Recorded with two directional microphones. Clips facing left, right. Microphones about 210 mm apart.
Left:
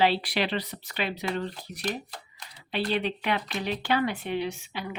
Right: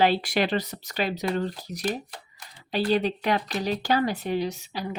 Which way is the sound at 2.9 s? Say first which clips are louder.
Right 5 dB; 40° right (ahead or behind).